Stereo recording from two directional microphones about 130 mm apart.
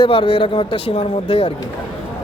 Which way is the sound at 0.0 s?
40° left (ahead or behind).